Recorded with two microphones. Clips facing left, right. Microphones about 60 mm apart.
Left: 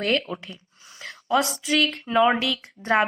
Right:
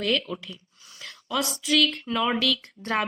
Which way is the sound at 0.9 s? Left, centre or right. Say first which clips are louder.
Left 4 dB; left.